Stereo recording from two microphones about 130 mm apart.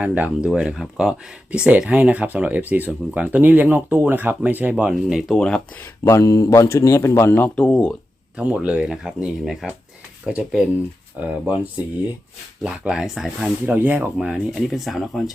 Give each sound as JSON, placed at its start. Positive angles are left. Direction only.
{"t": 0.0, "sound": "speech", "side_deg": -10}
{"t": 6.1, "sound": "a man's voice", "side_deg": 25}
{"t": 8.4, "sound": "speech", "side_deg": -5}